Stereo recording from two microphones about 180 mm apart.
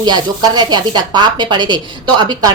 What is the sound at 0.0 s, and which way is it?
Speech, 20° right (ahead or behind).